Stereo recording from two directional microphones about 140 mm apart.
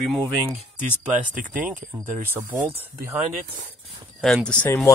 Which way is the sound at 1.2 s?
70° right (ahead or behind).